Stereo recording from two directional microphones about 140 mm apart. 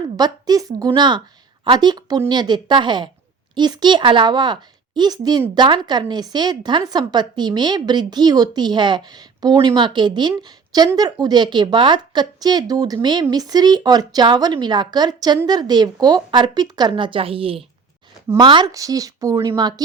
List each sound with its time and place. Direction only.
0.2 s a woman's voice: 30° right (ahead or behind)